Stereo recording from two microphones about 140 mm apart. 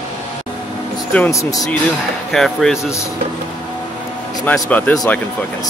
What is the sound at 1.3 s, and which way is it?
Speech, 25° left (ahead or behind).